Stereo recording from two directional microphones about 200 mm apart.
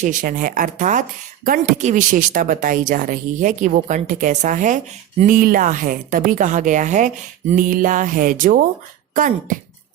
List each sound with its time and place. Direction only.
0.0 s speech: 40° right (ahead or behind)